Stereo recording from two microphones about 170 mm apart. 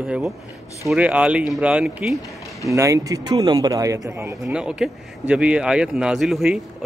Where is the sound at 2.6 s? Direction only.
20° right (ahead or behind).